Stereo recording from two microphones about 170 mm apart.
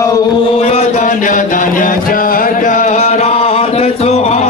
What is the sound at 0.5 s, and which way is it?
Mantra, 40° left (ahead or behind).